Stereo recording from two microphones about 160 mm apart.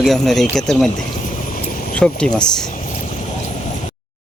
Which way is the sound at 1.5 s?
60° left (ahead or behind).